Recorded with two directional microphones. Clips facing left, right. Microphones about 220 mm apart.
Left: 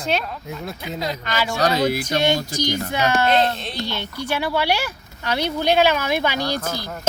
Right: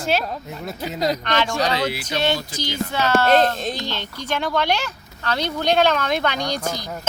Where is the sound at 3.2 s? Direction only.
45° right (ahead or behind).